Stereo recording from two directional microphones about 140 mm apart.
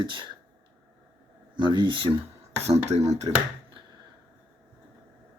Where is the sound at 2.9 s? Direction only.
55° right (ahead or behind).